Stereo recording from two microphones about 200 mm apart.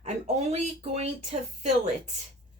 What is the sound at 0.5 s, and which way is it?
Speech, 35° right (ahead or behind).